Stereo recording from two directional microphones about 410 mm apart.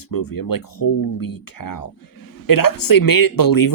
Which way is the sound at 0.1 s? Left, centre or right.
Left.